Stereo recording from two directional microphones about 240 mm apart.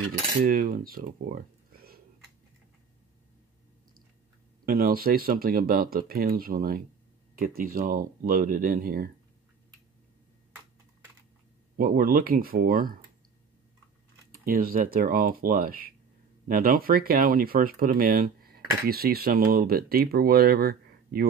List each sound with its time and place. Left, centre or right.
0.4 s speech: right
4.6 s speech: right
11.7 s speech: right
14.3 s speech: right